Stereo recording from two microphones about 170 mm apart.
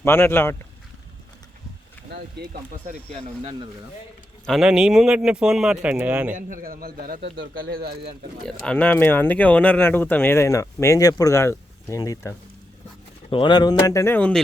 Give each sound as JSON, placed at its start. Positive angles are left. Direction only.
{"t": 0.0, "sound": "speech", "side_deg": 15}
{"t": 2.0, "sound": "speech", "side_deg": -70}
{"t": 3.2, "sound": "speech", "side_deg": -35}
{"t": 4.4, "sound": "a man's voice", "side_deg": 0}
{"t": 6.3, "sound": "a man's voice", "side_deg": -55}
{"t": 8.4, "sound": "speech", "side_deg": 5}
{"t": 13.3, "sound": "speech", "side_deg": 25}